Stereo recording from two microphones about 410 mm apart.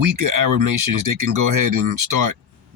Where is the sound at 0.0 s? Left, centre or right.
Right.